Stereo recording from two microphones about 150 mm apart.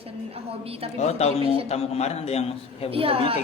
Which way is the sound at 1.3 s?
40° right (ahead or behind).